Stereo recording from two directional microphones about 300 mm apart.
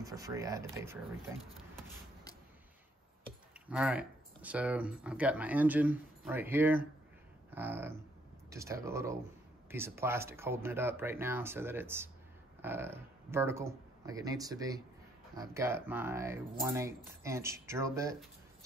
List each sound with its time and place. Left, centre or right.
0.0 s speech: centre
3.6 s speech: centre